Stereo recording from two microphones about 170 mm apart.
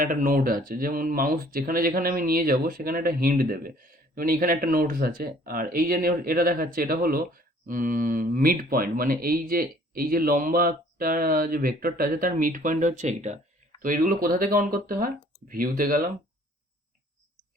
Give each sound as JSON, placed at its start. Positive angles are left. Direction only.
{"t": 0.0, "sound": "speech", "side_deg": -55}